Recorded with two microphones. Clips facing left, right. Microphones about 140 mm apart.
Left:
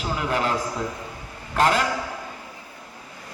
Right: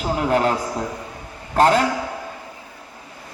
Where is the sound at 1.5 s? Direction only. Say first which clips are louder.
Right 5 dB; 35° right (ahead or behind).